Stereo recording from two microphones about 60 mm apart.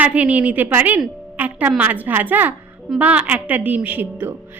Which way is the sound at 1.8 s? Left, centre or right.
Right.